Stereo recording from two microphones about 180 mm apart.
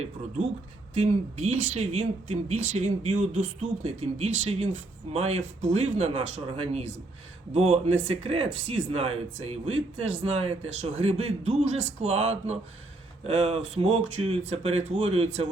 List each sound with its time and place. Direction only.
0.9 s speech: 35° right (ahead or behind)